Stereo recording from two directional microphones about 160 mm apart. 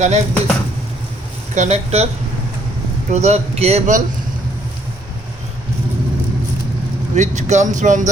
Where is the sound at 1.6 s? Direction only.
45° right (ahead or behind).